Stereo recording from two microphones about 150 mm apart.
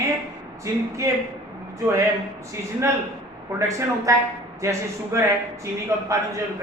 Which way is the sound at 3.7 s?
20° right (ahead or behind).